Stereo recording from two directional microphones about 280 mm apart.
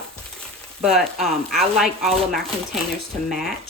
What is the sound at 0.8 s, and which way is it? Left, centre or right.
Speech, centre.